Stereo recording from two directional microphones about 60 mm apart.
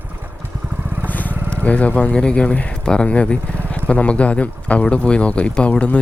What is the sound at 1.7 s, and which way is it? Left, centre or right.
Speech, left.